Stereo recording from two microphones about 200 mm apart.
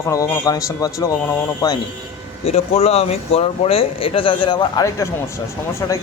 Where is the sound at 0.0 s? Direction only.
15° left (ahead or behind).